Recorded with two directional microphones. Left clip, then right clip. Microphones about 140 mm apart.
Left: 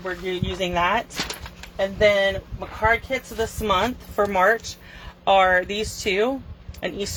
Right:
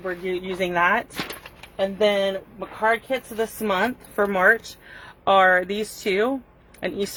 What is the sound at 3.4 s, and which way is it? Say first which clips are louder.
Speech: left 2 dB; 30° right (ahead or behind).